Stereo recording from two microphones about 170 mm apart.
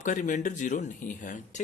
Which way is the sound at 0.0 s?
50° left (ahead or behind).